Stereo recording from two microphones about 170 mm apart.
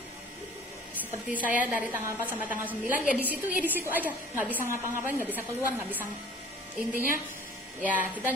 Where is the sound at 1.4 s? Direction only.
50° left (ahead or behind).